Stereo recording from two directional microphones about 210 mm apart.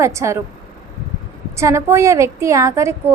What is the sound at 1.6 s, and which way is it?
A woman's voice, 15° right (ahead or behind).